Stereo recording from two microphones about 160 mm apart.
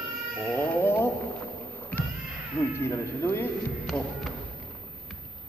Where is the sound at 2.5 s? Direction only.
15° left (ahead or behind).